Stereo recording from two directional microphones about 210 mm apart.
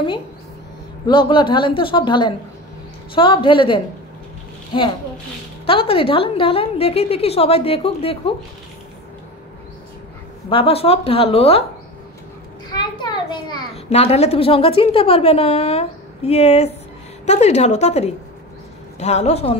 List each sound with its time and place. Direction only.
1.0 s a woman's voice: 25° left (ahead or behind)
10.5 s a woman's voice: 25° left (ahead or behind)
12.7 s a sound: 20° left (ahead or behind)
13.8 s a woman's voice: 30° left (ahead or behind)